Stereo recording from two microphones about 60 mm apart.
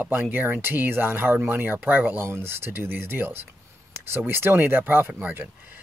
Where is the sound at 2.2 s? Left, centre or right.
Right.